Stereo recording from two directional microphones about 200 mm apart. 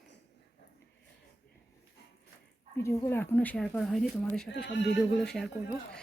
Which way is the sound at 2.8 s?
15° left (ahead or behind).